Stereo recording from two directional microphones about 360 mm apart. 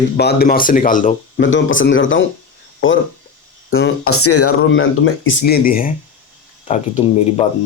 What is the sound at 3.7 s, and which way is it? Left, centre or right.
Speech, left.